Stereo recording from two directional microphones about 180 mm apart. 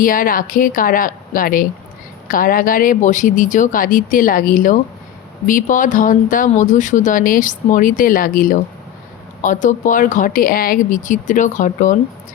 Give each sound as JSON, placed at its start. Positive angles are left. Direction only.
{"t": 0.0, "sound": "speech", "side_deg": 50}